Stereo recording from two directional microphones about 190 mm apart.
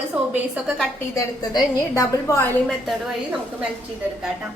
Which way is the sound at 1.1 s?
15° left (ahead or behind).